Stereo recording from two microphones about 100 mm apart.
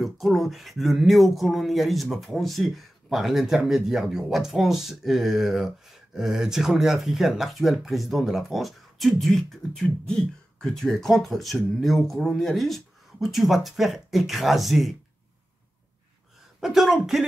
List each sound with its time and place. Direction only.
0.0 s speech: centre (ahead or behind)
16.6 s speech: 5° right (ahead or behind)